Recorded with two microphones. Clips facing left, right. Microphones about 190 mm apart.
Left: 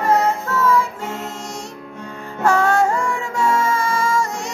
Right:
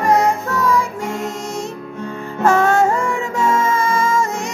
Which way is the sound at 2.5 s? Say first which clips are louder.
Right 2 dB; 20° right (ahead or behind).